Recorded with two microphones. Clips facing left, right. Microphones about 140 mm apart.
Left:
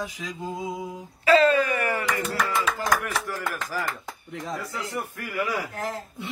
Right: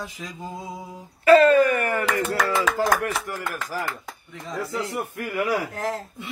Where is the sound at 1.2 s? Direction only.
50° right (ahead or behind).